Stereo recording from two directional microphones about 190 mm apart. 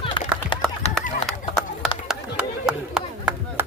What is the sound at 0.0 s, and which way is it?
Run, 25° left (ahead or behind).